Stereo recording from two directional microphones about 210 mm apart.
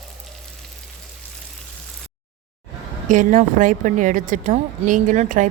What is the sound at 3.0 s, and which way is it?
A woman's voice, 40° right (ahead or behind).